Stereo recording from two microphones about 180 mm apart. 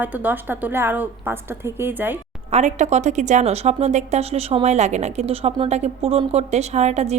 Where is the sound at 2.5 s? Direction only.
40° right (ahead or behind).